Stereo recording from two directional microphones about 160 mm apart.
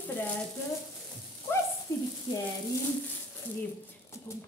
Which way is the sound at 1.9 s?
20° left (ahead or behind).